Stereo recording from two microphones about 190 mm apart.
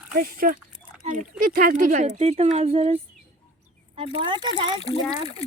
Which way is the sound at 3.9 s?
30° right (ahead or behind).